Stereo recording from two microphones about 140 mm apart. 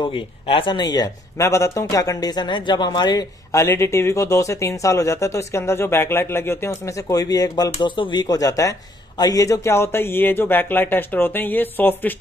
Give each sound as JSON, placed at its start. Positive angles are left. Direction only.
{"t": 0.0, "sound": "speech", "side_deg": 35}
{"t": 3.5, "sound": "speech", "side_deg": 20}